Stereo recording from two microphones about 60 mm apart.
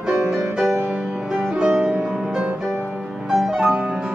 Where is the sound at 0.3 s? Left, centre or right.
Centre.